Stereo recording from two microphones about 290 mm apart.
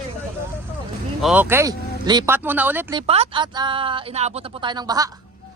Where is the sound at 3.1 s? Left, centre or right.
Centre.